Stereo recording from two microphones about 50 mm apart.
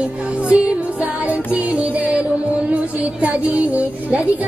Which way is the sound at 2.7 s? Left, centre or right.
Right.